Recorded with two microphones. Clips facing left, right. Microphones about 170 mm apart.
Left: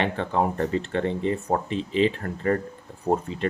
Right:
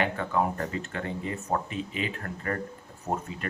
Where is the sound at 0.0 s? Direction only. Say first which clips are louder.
Left 3 dB; 30° left (ahead or behind).